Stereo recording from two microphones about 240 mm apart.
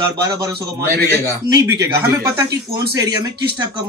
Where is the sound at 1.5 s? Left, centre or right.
Centre.